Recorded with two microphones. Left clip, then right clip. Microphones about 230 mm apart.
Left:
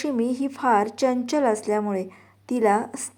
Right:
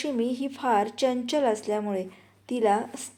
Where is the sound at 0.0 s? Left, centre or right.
Left.